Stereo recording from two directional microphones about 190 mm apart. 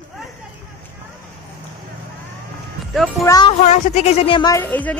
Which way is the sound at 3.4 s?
40° left (ahead or behind).